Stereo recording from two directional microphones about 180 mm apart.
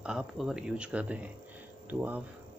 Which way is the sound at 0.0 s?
5° right (ahead or behind).